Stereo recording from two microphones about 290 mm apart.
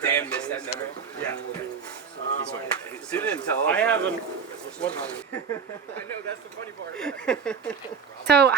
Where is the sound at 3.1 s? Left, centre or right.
Centre.